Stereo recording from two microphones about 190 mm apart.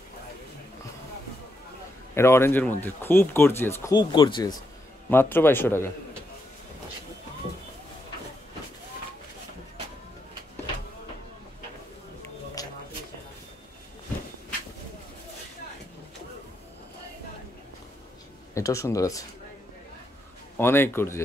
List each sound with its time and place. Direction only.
2.1 s speech: 15° left (ahead or behind)
5.1 s speech: 10° left (ahead or behind)
12.6 s a sound: 20° left (ahead or behind)
18.5 s speech: 15° left (ahead or behind)
20.5 s speech: 10° left (ahead or behind)